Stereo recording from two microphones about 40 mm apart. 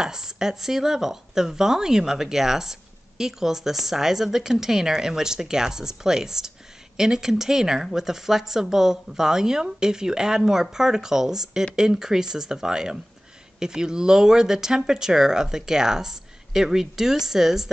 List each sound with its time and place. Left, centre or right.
0.0 s speech: centre